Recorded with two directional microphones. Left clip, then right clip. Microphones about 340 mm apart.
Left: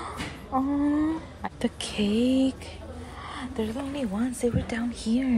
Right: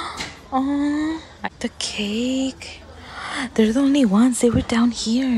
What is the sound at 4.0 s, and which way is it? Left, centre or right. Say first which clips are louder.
Speech: right 11 dB; right.